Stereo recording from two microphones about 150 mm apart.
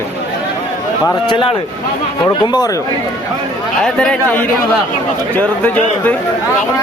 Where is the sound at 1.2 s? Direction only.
35° left (ahead or behind).